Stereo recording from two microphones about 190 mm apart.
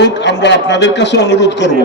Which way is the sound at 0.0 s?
65° left (ahead or behind).